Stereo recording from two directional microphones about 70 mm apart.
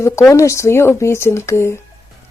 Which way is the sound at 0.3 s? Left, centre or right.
Left.